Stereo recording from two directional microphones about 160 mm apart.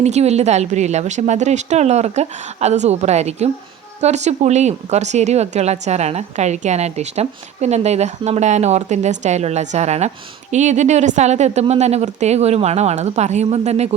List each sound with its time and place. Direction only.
0.0 s speech: 45° right (ahead or behind)